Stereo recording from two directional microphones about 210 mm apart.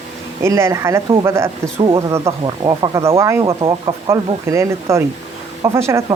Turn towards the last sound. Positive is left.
turn(degrees=-10)  # may be behind; listen again after turning